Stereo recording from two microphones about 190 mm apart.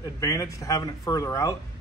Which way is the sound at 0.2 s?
15° left (ahead or behind).